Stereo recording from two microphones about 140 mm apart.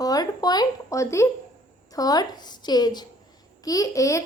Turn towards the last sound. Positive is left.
turn(degrees=25)  # may be behind; listen again after turning